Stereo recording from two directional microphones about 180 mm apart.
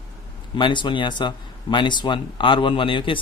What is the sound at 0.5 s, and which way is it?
A man's voice, 25° left (ahead or behind).